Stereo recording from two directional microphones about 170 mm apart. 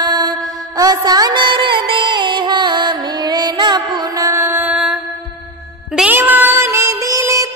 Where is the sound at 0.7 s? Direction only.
20° right (ahead or behind); by 4.9 s 5° right (ahead or behind).